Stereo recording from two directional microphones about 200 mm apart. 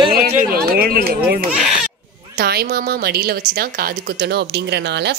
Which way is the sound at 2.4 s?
50° right (ahead or behind).